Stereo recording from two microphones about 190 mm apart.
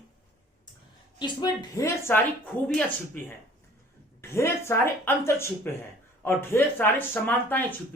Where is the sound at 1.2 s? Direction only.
20° left (ahead or behind).